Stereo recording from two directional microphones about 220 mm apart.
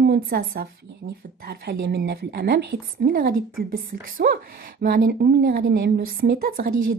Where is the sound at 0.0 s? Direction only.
45° right (ahead or behind).